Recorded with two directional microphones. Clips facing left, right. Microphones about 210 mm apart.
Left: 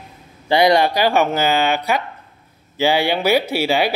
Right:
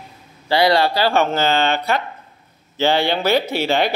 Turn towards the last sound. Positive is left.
turn(degrees=10)  # may be behind; listen again after turning